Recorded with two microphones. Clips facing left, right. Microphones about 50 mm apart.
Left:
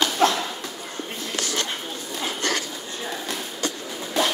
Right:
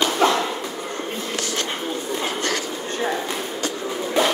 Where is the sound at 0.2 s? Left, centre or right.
Right.